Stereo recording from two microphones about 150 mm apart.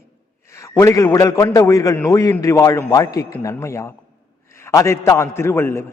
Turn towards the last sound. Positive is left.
turn(degrees=15)  # may be behind; listen again after turning